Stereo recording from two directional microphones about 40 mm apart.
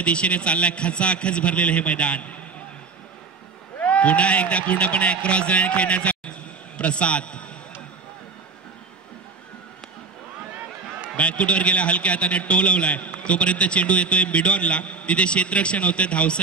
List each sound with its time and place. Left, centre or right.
0.0 s a man's voice: left
3.8 s a man's voice: left
11.1 s a man's voice: left